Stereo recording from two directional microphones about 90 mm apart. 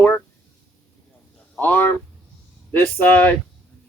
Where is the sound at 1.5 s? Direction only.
20° left (ahead or behind).